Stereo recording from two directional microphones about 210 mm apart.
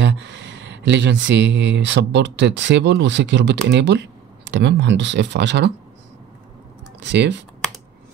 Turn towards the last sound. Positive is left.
turn(degrees=-55)  # may be behind; listen again after turning